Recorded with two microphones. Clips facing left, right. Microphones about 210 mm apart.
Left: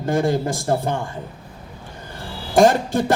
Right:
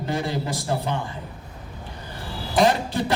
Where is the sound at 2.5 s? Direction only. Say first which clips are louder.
Left 5 dB; 45° left (ahead or behind).